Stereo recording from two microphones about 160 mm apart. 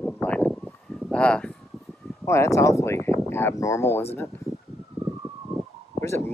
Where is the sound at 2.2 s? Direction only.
15° left (ahead or behind).